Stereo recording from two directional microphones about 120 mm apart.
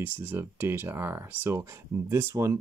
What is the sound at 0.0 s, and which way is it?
Speech, 15° right (ahead or behind).